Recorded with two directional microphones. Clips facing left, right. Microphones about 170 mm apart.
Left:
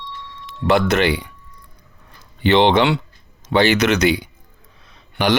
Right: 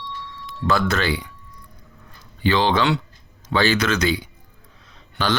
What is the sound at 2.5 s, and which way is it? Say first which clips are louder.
Speech: left 5 dB; 20° left (ahead or behind).